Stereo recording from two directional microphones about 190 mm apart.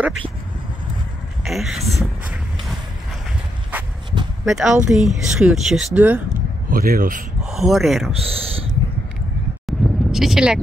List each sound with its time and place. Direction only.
1.4 s speech: centre (ahead or behind)
1.9 s vehicle: centre (ahead or behind)
3.7 s a sound: 10° right (ahead or behind)
4.1 s a sound: 25° right (ahead or behind)
4.5 s speech: centre (ahead or behind)
6.7 s speech: 50° right (ahead or behind)
7.4 s speech: centre (ahead or behind)
8.1 s speech: 30° right (ahead or behind)
9.7 s a sound: centre (ahead or behind)